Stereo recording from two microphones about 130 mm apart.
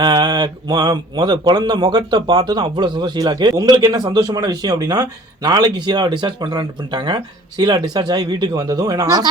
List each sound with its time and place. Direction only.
0.0 s speech: 30° right (ahead or behind)